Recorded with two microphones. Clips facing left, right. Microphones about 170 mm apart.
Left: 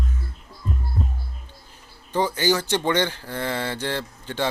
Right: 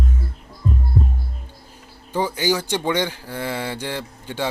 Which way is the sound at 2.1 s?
10° right (ahead or behind).